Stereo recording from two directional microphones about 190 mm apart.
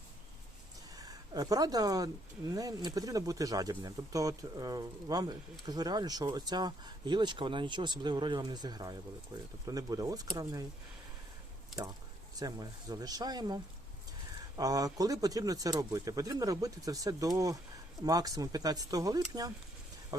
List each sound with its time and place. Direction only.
0.9 s speech: 20° right (ahead or behind)
12.4 s speech: 20° right (ahead or behind)